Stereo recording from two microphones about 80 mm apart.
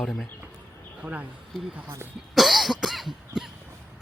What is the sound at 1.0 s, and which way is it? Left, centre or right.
Speech, centre.